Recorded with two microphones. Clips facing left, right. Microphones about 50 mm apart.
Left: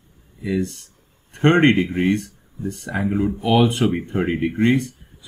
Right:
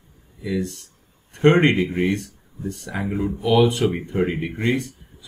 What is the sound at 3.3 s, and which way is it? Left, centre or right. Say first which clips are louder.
Speech: right 2 dB; left.